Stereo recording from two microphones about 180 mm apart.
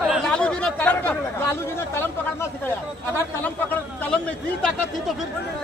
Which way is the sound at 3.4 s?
10° left (ahead or behind).